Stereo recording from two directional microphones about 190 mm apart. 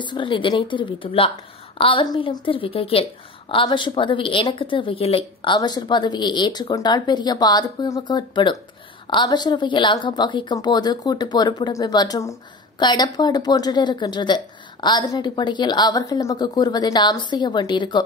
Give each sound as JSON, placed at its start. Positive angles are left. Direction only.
{"t": 0.0, "sound": "a woman's voice", "side_deg": 25}